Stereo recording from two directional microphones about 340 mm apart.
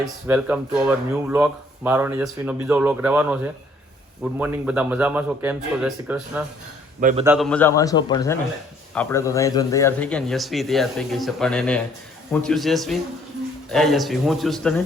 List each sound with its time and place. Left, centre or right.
0.0 s speech: centre
7.0 s a man's voice: right
7.3 s a man's voice: centre